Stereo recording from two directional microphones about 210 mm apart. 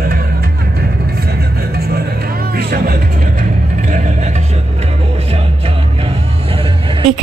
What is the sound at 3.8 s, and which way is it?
Music, 35° right (ahead or behind).